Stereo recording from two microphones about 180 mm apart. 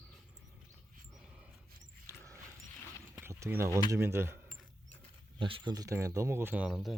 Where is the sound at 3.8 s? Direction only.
15° right (ahead or behind).